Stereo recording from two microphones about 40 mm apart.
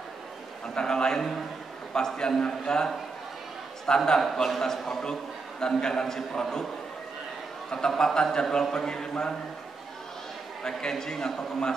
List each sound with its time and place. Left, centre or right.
0.7 s a man's voice: centre
8.0 s a man's voice: centre
10.6 s a man's voice: centre